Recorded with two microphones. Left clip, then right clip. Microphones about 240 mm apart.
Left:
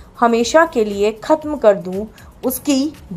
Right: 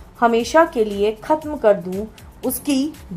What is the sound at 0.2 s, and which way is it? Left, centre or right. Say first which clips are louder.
A woman's voice: left 2 dB; centre.